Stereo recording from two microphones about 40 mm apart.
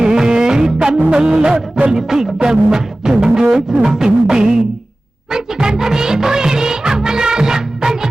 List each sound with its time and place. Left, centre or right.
0.0 s music: centre
5.3 s music of bollywood: centre